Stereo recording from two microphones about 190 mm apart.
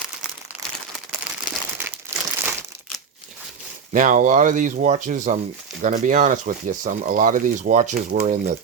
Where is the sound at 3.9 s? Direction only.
45° right (ahead or behind).